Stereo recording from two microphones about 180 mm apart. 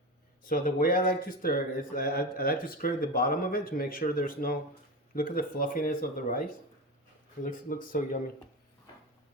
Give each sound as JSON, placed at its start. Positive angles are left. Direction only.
{"t": 0.4, "sound": "speech", "side_deg": 50}